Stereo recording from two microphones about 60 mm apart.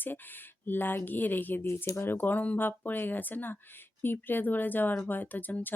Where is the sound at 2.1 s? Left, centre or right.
Left.